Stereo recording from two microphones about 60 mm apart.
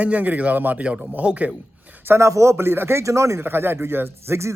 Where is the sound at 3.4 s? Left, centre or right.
Right.